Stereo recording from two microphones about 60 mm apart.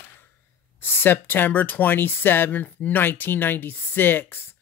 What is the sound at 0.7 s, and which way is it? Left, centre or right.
Speech, left.